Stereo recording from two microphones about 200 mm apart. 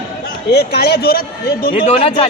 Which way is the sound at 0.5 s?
50° left (ahead or behind).